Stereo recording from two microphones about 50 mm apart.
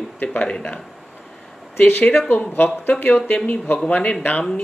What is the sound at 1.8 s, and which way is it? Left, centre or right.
Speech, left.